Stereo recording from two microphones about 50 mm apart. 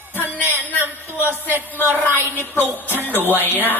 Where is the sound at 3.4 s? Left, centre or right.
Left.